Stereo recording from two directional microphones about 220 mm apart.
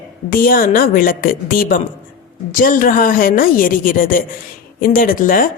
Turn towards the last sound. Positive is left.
turn(degrees=40)  # may be behind; listen again after turning